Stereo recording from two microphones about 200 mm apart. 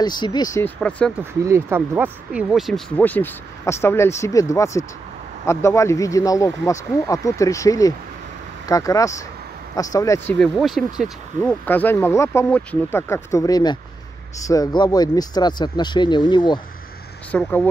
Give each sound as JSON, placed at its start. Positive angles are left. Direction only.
{"t": 0.0, "sound": "speech", "side_deg": 20}
{"t": 1.4, "sound": "speech", "side_deg": -15}
{"t": 10.4, "sound": "speech", "side_deg": 0}
{"t": 17.3, "sound": "speech", "side_deg": 5}